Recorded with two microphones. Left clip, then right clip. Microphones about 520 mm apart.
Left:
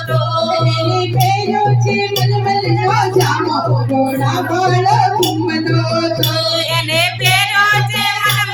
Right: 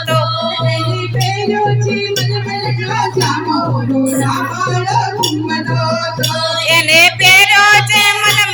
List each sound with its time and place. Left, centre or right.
6.7 s music: left